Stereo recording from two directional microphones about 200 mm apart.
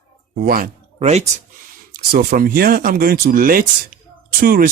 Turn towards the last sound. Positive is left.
turn(degrees=-45)  # may be behind; listen again after turning